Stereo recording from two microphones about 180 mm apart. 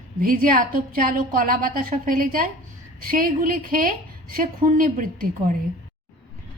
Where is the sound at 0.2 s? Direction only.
50° right (ahead or behind).